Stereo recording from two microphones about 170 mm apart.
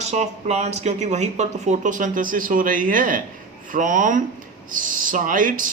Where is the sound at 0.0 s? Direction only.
40° right (ahead or behind).